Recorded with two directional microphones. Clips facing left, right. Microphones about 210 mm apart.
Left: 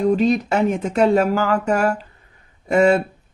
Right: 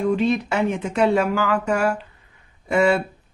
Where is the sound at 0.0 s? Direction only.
40° left (ahead or behind).